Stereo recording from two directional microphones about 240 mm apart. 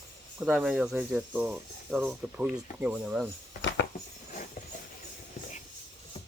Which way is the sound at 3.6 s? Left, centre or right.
Left.